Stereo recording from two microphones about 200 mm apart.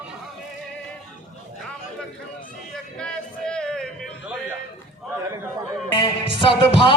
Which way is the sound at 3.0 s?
5° left (ahead or behind).